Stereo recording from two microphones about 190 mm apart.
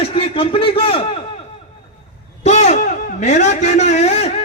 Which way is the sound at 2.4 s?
35° left (ahead or behind).